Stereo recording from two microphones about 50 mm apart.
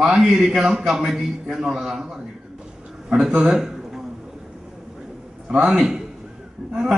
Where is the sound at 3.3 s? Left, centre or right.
Centre.